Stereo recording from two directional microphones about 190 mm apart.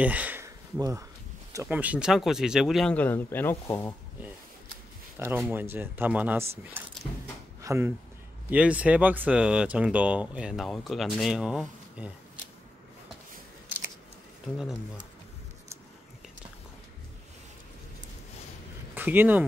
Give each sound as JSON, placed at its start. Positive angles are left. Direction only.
{"t": 0.0, "sound": "a sound", "side_deg": -10}
{"t": 1.5, "sound": "speech", "side_deg": -10}
{"t": 5.5, "sound": "speech", "side_deg": -10}
{"t": 7.6, "sound": "speech", "side_deg": -15}
{"t": 18.9, "sound": "speech", "side_deg": -10}